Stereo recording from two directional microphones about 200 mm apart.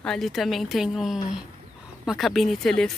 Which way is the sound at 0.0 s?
Centre (ahead or behind).